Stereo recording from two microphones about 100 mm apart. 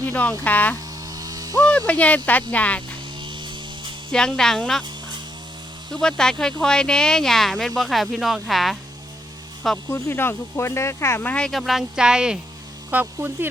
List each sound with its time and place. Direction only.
0.0 s speech: 15° left (ahead or behind)
1.0 s owl: 40° right (ahead or behind)
1.9 s speech: 15° left (ahead or behind)
3.2 s a sound: 55° right (ahead or behind)
4.1 s speech: 5° left (ahead or behind)
5.9 s speech: 5° left (ahead or behind)
9.9 s speech: 25° left (ahead or behind)
11.5 s speech: centre (ahead or behind)
12.9 s speech: 20° right (ahead or behind)